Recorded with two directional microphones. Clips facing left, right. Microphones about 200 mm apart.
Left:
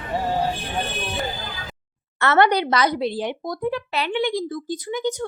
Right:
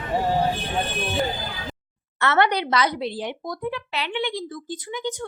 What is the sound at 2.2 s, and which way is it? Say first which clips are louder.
Speech: left 3 dB; 45° left (ahead or behind).